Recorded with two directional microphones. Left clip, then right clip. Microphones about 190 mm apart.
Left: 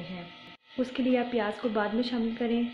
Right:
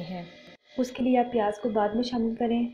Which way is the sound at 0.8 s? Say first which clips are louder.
Right 3 dB; 15° right (ahead or behind).